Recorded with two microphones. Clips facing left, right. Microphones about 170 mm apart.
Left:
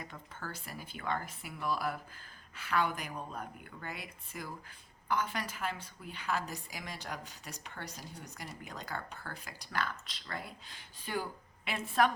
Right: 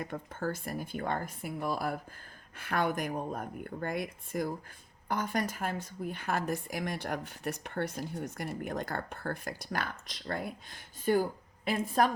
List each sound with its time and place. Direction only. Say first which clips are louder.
0.0 s a woman's voice: right 10 dB; 50° right (ahead or behind)